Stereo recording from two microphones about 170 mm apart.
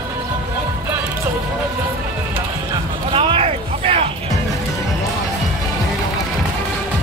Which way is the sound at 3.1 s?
30° right (ahead or behind).